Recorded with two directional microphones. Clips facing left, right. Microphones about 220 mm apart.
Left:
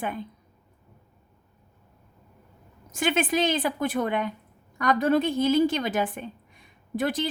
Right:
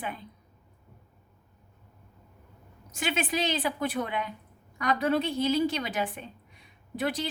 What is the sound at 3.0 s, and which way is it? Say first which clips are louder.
Speech: left 5 dB; 50° left (ahead or behind).